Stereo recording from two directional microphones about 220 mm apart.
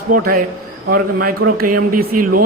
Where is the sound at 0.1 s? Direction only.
40° right (ahead or behind).